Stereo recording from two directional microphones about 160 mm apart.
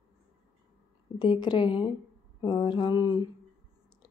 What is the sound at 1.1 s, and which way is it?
Speech, 30° left (ahead or behind).